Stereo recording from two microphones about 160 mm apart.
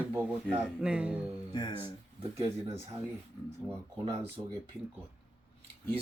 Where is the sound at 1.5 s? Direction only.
25° left (ahead or behind).